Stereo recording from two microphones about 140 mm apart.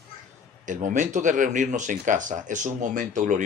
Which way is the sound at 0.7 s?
65° right (ahead or behind).